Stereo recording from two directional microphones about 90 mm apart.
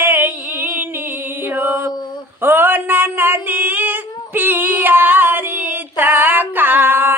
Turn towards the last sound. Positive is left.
turn(degrees=-25)  # may be behind; listen again after turning